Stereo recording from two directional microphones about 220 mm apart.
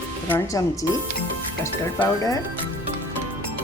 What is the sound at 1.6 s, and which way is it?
Speech, 15° left (ahead or behind).